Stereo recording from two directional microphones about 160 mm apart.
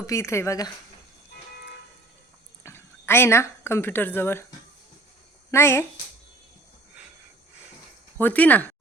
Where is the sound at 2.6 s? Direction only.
15° left (ahead or behind).